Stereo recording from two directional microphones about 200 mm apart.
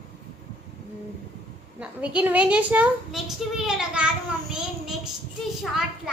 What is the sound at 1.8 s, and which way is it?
A woman's voice, 5° right (ahead or behind).